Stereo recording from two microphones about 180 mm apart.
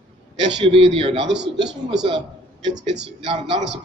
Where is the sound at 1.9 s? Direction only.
25° right (ahead or behind).